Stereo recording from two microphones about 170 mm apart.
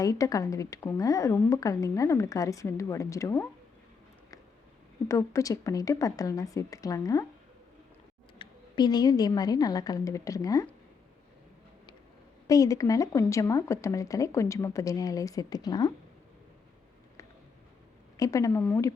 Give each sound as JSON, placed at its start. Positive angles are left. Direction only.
{"t": 0.0, "sound": "speech", "side_deg": 20}
{"t": 5.0, "sound": "speech", "side_deg": 20}
{"t": 8.4, "sound": "speech", "side_deg": 25}
{"t": 12.5, "sound": "speech", "side_deg": 20}
{"t": 18.2, "sound": "speech", "side_deg": 20}